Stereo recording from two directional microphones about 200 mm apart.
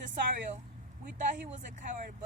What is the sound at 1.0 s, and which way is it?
Speech, 40° right (ahead or behind).